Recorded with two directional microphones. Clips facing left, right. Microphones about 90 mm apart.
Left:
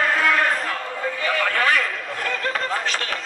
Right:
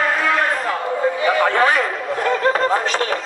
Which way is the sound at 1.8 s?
40° right (ahead or behind).